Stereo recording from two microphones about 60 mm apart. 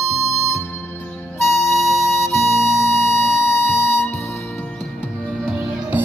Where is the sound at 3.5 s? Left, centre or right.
Left.